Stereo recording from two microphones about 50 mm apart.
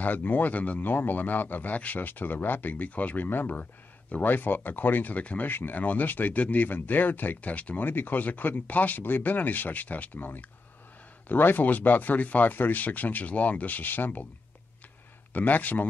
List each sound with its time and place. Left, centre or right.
0.0 s speech: left
5.5 s speech: left
5.8 s speech: left
15.3 s speech: left